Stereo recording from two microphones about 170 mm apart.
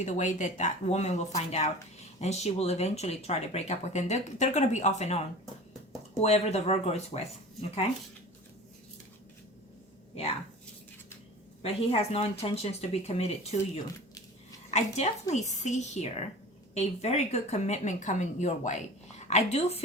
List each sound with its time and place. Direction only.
0.0 s speech: 45° left (ahead or behind)
6.2 s speech: 40° left (ahead or behind)
11.6 s speech: 35° left (ahead or behind)
14.7 s a woman's voice: 40° left (ahead or behind)